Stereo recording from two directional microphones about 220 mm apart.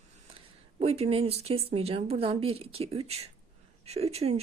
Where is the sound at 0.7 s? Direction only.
25° right (ahead or behind).